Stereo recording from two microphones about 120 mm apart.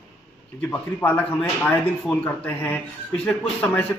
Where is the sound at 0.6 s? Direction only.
15° left (ahead or behind).